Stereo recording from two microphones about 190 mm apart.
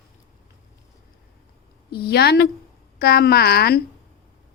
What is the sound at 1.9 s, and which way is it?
A woman's voice, 55° left (ahead or behind).